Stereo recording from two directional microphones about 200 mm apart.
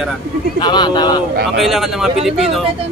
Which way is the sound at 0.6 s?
20° left (ahead or behind).